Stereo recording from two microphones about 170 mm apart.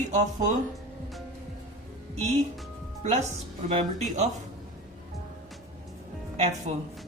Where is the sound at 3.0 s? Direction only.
40° right (ahead or behind).